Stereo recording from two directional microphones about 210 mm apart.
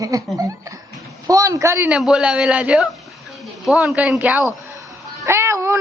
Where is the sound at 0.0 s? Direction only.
15° right (ahead or behind).